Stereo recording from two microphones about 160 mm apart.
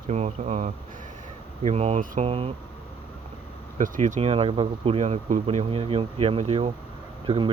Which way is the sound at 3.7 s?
55° right (ahead or behind).